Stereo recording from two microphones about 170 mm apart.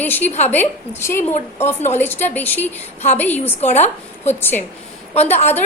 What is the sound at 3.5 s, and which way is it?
Speech, 40° left (ahead or behind).